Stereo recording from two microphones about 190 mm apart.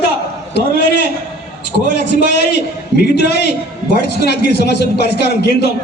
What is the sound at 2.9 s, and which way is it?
A man's voice, 60° left (ahead or behind).